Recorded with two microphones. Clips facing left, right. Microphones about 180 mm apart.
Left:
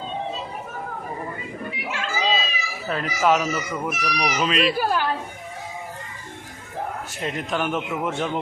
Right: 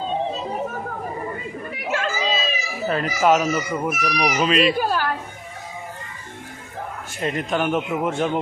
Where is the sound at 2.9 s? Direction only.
Centre (ahead or behind).